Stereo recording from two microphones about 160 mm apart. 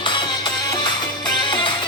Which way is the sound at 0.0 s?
30° left (ahead or behind).